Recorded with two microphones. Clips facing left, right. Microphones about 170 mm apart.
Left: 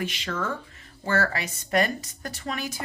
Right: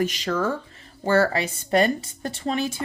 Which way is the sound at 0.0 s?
40° right (ahead or behind).